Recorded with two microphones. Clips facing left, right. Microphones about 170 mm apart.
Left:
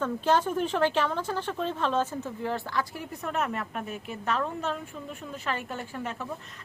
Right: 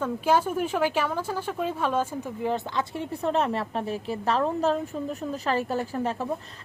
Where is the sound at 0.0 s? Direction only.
10° right (ahead or behind).